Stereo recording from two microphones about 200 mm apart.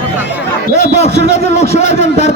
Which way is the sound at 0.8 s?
35° left (ahead or behind).